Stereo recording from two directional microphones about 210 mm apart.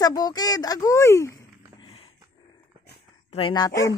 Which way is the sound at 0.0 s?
20° left (ahead or behind).